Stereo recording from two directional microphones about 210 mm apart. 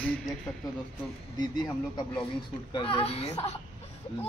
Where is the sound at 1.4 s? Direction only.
20° left (ahead or behind).